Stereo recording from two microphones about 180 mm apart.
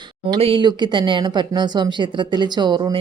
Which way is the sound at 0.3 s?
30° right (ahead or behind).